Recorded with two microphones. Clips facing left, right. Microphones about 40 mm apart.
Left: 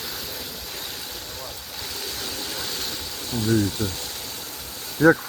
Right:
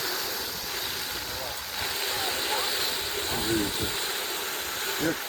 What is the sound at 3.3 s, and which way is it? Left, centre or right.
Speech, right.